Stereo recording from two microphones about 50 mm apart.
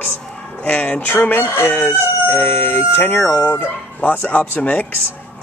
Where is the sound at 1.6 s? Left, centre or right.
Left.